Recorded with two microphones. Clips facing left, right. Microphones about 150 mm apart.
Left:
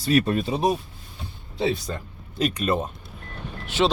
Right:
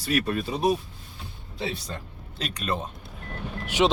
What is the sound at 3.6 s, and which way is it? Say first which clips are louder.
Speech: even; 15° right (ahead or behind).